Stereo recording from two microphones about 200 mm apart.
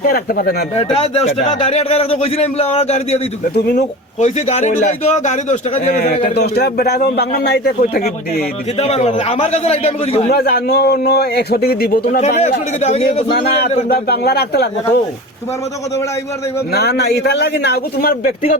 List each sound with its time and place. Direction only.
0.0 s a man's voice: 50° left (ahead or behind)
0.8 s a man's voice: 30° left (ahead or behind)
6.3 s a man's voice: 55° left (ahead or behind)
8.8 s a man's voice: 30° left (ahead or behind)
10.3 s a man's voice: 55° left (ahead or behind)
12.2 s a man's voice: 35° left (ahead or behind)
13.8 s a man's voice: 55° left (ahead or behind)
16.7 s a man's voice: 55° left (ahead or behind)